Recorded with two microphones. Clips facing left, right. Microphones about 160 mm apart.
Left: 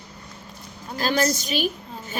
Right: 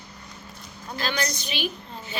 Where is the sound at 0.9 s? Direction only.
45° left (ahead or behind).